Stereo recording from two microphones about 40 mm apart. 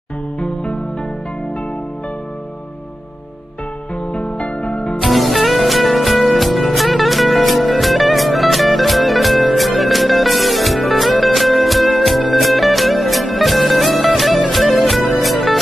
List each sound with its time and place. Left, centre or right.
4.0 s music: left
5.0 s music: centre